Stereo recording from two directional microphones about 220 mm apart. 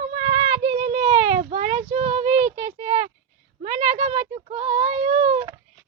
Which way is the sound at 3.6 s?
30° right (ahead or behind).